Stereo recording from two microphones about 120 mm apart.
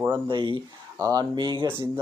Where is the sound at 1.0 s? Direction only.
30° right (ahead or behind).